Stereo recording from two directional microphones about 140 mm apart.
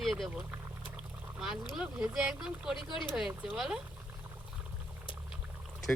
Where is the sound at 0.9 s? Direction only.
5° right (ahead or behind).